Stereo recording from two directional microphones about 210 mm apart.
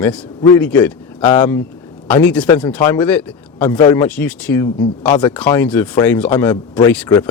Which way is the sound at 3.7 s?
20° left (ahead or behind).